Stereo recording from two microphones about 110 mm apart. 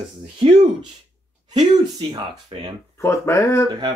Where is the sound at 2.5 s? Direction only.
55° right (ahead or behind).